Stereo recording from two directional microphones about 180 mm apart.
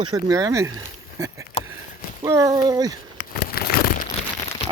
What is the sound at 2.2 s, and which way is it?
Speech, 15° right (ahead or behind).